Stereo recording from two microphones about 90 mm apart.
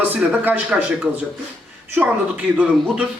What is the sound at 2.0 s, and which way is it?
Speech, 15° right (ahead or behind).